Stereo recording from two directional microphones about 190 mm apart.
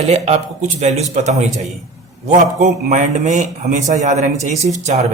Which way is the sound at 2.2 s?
40° right (ahead or behind).